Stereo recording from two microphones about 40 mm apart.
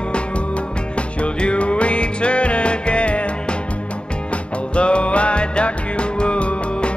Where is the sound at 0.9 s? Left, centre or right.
Left.